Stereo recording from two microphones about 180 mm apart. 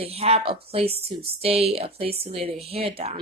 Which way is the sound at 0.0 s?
35° right (ahead or behind).